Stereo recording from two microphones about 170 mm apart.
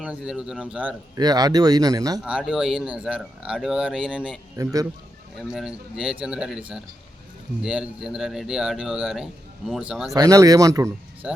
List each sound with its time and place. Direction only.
0.0 s speech: 5° right (ahead or behind)
1.1 s a man's voice: 25° right (ahead or behind)
2.2 s speech: 5° right (ahead or behind)
4.5 s a man's voice: 20° right (ahead or behind)
5.4 s speech: centre (ahead or behind)
10.2 s a man's voice: 20° right (ahead or behind)